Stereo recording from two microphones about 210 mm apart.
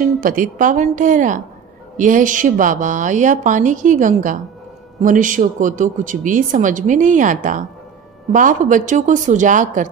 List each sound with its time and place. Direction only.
0.2 s a woman's voice: 40° right (ahead or behind)